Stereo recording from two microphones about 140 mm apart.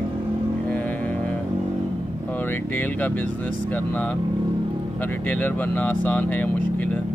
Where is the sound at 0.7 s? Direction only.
10° left (ahead or behind).